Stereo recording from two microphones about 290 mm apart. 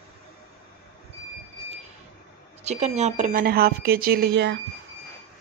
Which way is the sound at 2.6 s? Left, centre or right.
Right.